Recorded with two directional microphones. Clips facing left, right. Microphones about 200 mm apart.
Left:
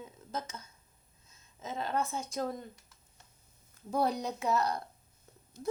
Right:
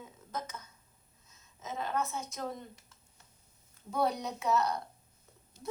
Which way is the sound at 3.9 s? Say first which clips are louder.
Left 1 dB; 30° left (ahead or behind).